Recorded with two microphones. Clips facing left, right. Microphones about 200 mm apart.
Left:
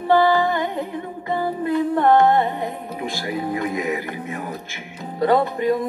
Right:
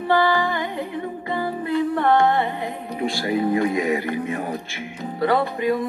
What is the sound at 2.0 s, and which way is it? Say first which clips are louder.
Music: left 4 dB; 45° left (ahead or behind).